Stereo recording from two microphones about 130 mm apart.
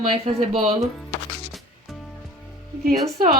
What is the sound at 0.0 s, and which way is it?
Speech, 50° right (ahead or behind).